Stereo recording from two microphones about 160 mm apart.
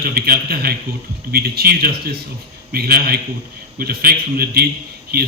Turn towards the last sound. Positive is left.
turn(degrees=-75)  # may be behind; listen again after turning